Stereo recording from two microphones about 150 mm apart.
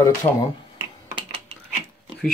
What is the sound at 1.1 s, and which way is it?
Typing, 35° right (ahead or behind).